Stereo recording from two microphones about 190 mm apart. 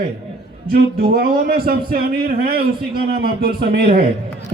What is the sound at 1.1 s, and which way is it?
A man's voice, 50° right (ahead or behind).